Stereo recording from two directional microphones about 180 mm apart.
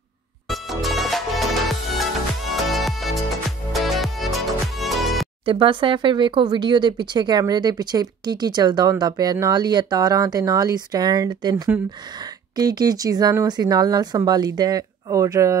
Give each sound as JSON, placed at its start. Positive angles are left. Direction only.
{"t": 0.5, "sound": "music", "side_deg": 0}
{"t": 2.5, "sound": "music", "side_deg": 0}
{"t": 5.4, "sound": "speech", "side_deg": -30}